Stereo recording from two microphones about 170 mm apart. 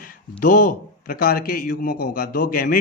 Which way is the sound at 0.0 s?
55° left (ahead or behind).